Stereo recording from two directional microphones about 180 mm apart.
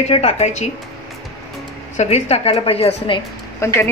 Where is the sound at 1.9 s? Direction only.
35° left (ahead or behind).